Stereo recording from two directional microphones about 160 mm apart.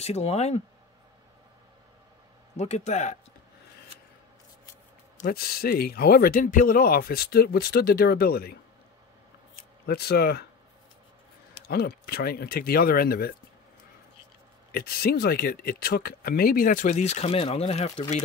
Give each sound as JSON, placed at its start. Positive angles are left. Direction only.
{"t": 0.0, "sound": "speech", "side_deg": 40}
{"t": 2.5, "sound": "a man's voice", "side_deg": 45}
{"t": 5.2, "sound": "speech", "side_deg": 75}
{"t": 9.8, "sound": "speech", "side_deg": 85}
{"t": 11.6, "sound": "speech", "side_deg": 80}
{"t": 14.7, "sound": "speech", "side_deg": 70}